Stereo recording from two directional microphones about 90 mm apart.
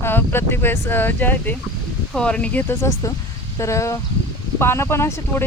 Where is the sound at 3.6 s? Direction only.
35° left (ahead or behind).